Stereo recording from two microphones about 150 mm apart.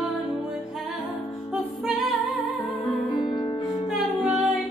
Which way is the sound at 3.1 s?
25° left (ahead or behind).